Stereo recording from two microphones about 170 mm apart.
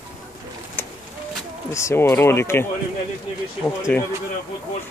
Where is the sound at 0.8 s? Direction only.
10° left (ahead or behind).